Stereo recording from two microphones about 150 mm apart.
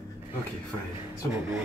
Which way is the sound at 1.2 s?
20° right (ahead or behind).